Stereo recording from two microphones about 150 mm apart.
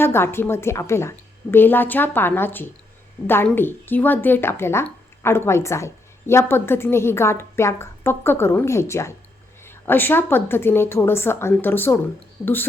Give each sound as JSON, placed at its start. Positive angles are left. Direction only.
{"t": 0.0, "sound": "a woman's voice", "side_deg": 15}